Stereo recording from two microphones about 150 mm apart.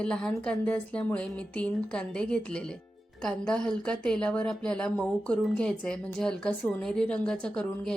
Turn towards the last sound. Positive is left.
turn(degrees=5)  # may be behind; listen again after turning